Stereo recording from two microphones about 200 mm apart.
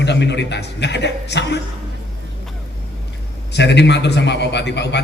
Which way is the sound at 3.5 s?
60° left (ahead or behind).